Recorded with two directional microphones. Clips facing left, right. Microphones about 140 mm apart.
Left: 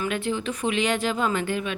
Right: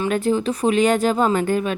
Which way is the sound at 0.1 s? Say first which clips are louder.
Right 7 dB; 40° right (ahead or behind).